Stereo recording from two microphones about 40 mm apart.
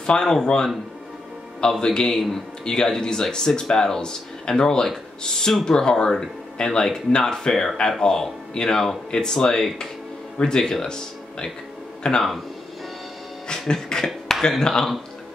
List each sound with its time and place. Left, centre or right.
0.0 s speech: centre
13.5 s a sound: centre
14.6 s speech: centre